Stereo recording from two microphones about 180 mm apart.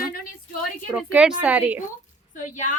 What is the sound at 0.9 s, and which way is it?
Speech, 5° right (ahead or behind).